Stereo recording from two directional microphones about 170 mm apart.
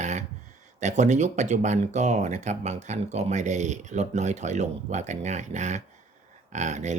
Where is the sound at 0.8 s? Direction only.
45° right (ahead or behind).